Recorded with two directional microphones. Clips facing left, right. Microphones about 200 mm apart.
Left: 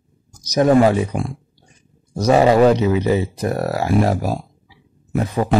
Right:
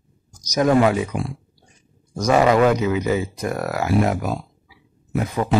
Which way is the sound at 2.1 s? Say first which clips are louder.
Left 3 dB; 30° left (ahead or behind).